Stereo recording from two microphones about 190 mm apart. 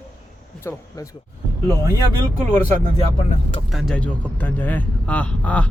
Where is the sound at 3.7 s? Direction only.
Centre (ahead or behind).